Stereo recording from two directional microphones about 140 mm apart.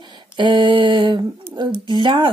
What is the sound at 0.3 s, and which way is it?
Speech, 35° right (ahead or behind).